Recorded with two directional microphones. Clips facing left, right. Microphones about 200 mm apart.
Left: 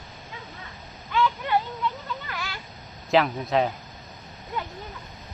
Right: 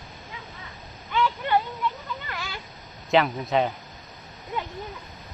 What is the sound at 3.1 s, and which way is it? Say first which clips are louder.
Speech: even; centre (ahead or behind).